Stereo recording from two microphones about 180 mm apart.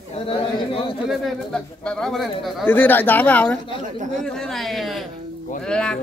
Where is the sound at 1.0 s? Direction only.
Centre (ahead or behind).